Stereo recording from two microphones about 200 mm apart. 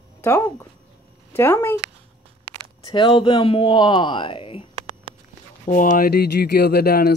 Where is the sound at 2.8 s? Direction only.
25° left (ahead or behind).